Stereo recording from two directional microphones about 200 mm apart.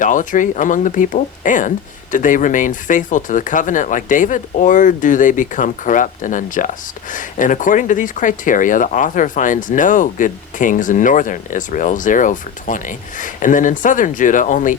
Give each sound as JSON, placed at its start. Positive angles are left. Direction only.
{"t": 0.0, "sound": "speech", "side_deg": 40}